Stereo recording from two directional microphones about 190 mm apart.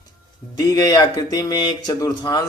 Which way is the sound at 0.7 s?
20° left (ahead or behind).